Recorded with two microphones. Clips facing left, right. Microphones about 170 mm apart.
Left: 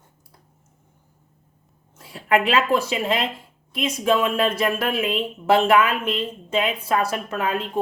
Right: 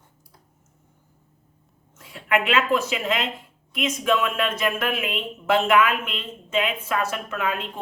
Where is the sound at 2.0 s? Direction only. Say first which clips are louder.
Left 3 dB; 35° left (ahead or behind).